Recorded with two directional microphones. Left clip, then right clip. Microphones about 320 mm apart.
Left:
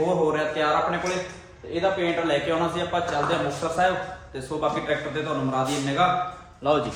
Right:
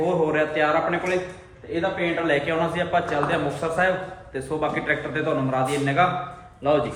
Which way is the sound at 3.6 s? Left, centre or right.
Centre.